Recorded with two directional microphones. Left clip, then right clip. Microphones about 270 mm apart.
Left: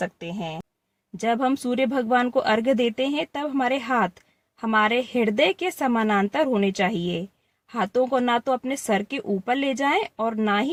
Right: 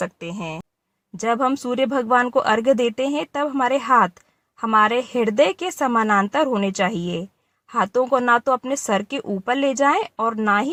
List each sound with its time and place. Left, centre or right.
0.0 s speech: centre